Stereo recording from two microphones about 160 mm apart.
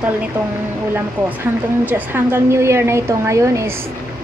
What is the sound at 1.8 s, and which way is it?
A woman's voice, 10° right (ahead or behind).